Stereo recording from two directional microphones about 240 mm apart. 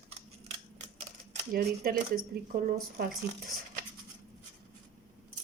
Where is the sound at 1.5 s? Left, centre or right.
Right.